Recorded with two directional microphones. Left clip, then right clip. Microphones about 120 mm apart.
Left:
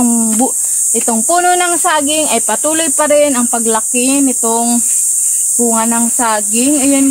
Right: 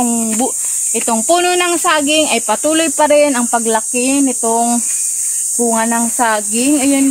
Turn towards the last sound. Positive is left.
turn(degrees=0)  # may be behind; listen again after turning